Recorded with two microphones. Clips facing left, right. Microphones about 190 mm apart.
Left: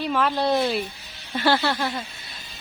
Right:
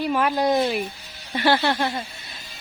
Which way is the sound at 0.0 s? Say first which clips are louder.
Right 2 dB; 10° right (ahead or behind).